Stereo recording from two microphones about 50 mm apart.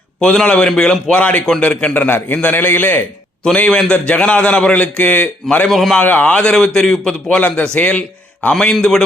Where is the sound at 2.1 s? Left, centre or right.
Left.